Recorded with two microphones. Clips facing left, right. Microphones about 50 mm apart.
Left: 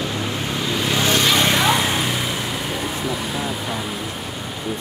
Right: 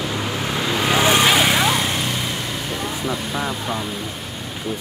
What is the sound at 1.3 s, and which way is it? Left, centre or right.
Vehicle, centre.